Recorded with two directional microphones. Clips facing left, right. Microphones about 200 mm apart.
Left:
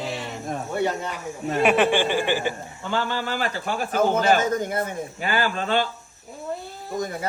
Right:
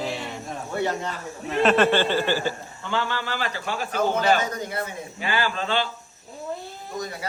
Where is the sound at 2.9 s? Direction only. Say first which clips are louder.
Left 2 dB; 45° left (ahead or behind).